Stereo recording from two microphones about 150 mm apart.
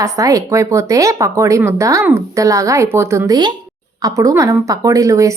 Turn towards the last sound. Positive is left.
turn(degrees=-20)  # may be behind; listen again after turning